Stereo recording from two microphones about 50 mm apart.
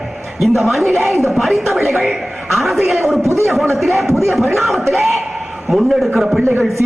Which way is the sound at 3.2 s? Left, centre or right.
Right.